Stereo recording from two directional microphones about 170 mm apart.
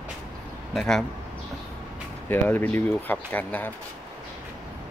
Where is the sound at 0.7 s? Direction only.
Centre (ahead or behind).